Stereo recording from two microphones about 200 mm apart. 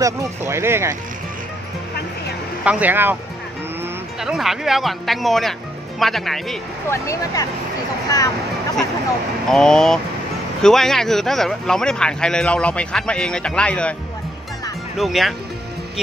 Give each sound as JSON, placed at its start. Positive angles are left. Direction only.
{"t": 0.0, "sound": "speech", "side_deg": -15}
{"t": 2.6, "sound": "speech", "side_deg": -5}
{"t": 4.2, "sound": "speech", "side_deg": 0}
{"t": 6.9, "sound": "speech", "side_deg": 15}
{"t": 9.5, "sound": "speech", "side_deg": 5}
{"t": 15.0, "sound": "speech", "side_deg": 0}